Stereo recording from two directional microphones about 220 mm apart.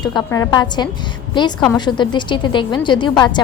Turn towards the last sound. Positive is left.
turn(degrees=20)  # may be behind; listen again after turning